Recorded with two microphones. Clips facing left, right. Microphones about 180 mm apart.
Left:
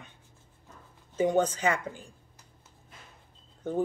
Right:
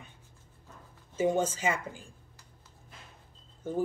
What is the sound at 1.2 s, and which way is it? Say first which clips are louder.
Speech: left 2 dB; 5° right (ahead or behind).